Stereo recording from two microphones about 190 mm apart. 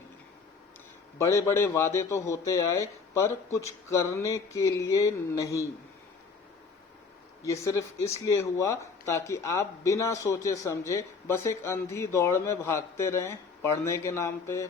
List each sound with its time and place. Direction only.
1.2 s speech: 15° left (ahead or behind)
7.4 s speech: 15° left (ahead or behind)